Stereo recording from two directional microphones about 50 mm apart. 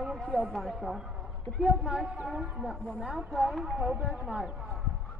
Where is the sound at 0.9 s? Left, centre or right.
Centre.